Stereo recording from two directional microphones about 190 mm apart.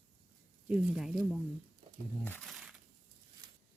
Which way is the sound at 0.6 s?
Centre (ahead or behind).